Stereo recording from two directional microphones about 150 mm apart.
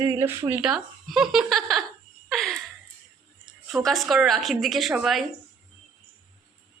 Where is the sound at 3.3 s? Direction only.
Centre (ahead or behind).